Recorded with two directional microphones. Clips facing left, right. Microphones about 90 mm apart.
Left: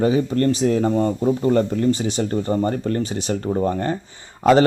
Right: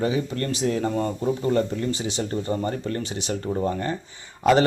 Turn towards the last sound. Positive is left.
turn(degrees=40)  # may be behind; listen again after turning